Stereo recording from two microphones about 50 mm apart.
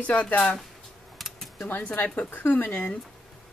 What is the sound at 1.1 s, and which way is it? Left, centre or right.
Typing, centre.